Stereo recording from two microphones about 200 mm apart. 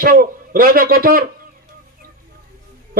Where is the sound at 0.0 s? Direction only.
45° right (ahead or behind).